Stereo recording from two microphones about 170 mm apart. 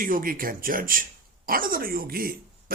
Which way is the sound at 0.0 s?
55° right (ahead or behind).